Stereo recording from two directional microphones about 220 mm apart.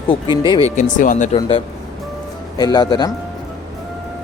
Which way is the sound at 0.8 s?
35° left (ahead or behind).